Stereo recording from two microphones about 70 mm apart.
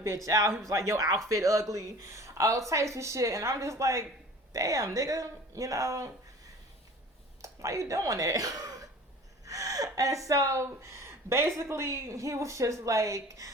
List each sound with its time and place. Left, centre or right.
0.3 s speech: right
7.4 s speech: right